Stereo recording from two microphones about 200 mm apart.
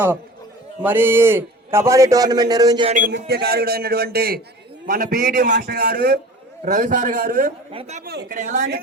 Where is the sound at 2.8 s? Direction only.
40° right (ahead or behind).